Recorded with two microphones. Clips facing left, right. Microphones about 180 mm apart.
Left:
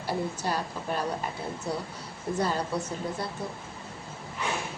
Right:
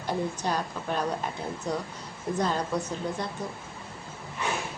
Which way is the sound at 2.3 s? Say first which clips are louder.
Right 1 dB; 10° left (ahead or behind).